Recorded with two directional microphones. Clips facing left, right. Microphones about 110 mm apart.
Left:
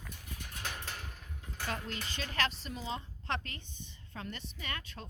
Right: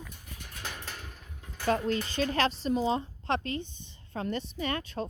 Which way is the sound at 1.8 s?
40° right (ahead or behind).